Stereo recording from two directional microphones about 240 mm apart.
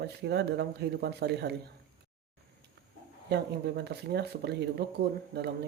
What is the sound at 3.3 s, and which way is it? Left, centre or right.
Speech, right.